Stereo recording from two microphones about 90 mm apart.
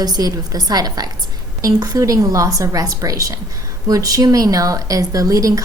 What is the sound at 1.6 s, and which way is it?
Speech, 40° right (ahead or behind).